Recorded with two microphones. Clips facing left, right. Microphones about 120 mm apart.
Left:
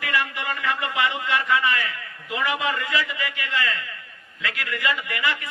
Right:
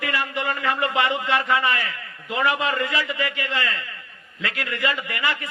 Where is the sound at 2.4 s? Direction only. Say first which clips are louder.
Right 3 dB; 35° right (ahead or behind).